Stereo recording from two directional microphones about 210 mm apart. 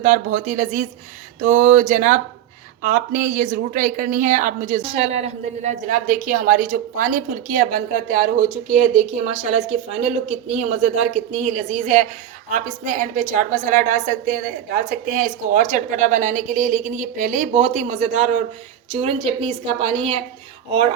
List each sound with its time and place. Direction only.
0.0 s a woman's voice: 35° right (ahead or behind)